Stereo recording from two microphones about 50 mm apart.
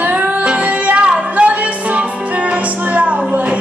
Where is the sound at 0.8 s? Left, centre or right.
Right.